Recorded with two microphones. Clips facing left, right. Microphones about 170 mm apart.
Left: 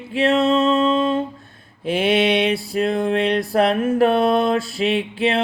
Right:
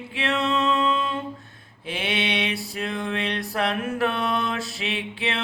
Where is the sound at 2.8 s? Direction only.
40° left (ahead or behind).